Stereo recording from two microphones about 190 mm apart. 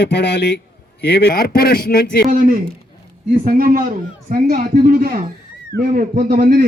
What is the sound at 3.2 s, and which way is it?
A man's voice, 50° right (ahead or behind).